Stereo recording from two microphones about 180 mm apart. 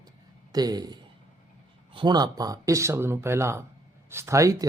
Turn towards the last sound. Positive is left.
turn(degrees=-15)  # may be behind; listen again after turning